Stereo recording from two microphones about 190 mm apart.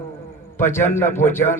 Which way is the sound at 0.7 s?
10° left (ahead or behind).